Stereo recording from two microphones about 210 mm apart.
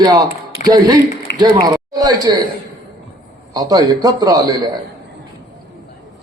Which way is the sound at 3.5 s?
15° right (ahead or behind).